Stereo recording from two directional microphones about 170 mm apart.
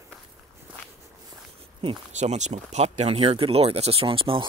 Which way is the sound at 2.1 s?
45° right (ahead or behind).